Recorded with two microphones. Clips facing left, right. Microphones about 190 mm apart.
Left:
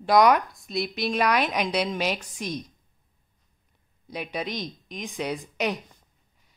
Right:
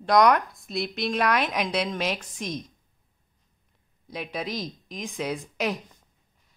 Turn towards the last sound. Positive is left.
turn(degrees=0)  # may be behind; listen again after turning